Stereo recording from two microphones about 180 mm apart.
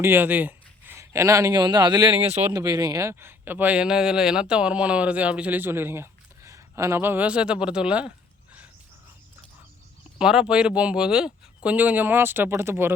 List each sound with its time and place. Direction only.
0.0 s a man's voice: 10° right (ahead or behind)
10.2 s a man's voice: 5° right (ahead or behind)